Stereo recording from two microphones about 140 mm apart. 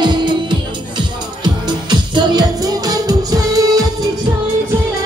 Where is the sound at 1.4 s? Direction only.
30° right (ahead or behind).